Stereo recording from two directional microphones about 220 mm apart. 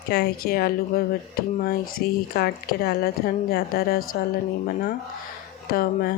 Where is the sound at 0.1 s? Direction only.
45° left (ahead or behind).